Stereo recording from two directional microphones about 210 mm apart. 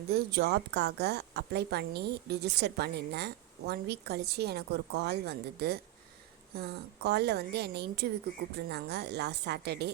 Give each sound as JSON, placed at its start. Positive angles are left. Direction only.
{"t": 0.1, "sound": "a woman's voice", "side_deg": -50}